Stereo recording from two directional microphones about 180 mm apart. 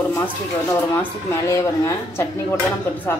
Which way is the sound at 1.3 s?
15° left (ahead or behind).